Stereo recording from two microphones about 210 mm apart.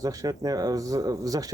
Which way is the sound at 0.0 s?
15° right (ahead or behind).